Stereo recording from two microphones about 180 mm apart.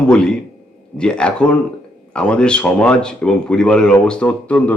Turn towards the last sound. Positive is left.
turn(degrees=5)  # may be behind; listen again after turning